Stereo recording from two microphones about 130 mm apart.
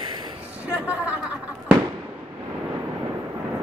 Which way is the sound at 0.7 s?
10° right (ahead or behind).